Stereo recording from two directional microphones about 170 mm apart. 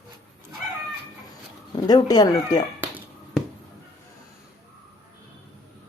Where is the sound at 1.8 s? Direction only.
25° left (ahead or behind).